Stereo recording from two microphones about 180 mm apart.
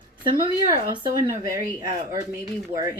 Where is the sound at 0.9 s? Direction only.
15° right (ahead or behind).